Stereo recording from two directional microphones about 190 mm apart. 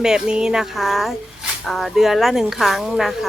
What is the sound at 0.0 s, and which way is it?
Speech, 5° right (ahead or behind).